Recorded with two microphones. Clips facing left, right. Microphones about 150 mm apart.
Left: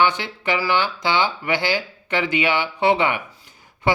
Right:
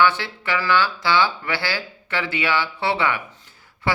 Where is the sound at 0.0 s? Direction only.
15° left (ahead or behind).